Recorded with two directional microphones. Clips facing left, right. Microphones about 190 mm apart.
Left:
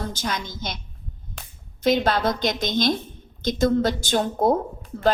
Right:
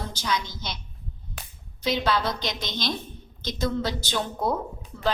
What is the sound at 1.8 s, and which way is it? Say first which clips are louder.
A woman's voice: left 5 dB; 50° left (ahead or behind).